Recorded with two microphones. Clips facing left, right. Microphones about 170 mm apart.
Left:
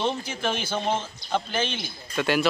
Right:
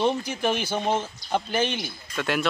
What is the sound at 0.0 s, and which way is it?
Speech, 15° right (ahead or behind).